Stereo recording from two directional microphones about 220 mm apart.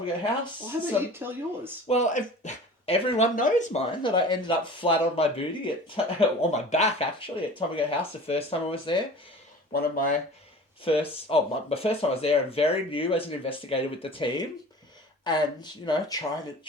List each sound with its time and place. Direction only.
1.2 s speech: 10° right (ahead or behind)
1.9 s speech: 30° left (ahead or behind)
9.7 s speech: 40° left (ahead or behind)
10.8 s speech: 25° left (ahead or behind)